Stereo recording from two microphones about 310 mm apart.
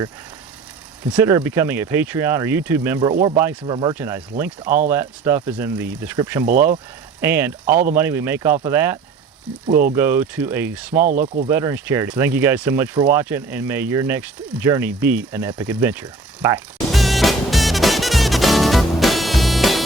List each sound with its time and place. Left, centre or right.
1.1 s speech: centre
11.0 s speech: right
11.4 s speech: centre